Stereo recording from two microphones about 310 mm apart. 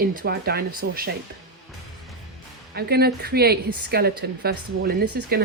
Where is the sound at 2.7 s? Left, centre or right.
Right.